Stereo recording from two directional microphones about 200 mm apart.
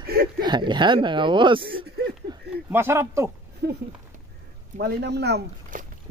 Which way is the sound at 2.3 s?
20° right (ahead or behind).